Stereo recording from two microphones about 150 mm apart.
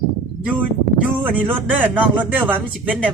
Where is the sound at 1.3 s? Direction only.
10° right (ahead or behind).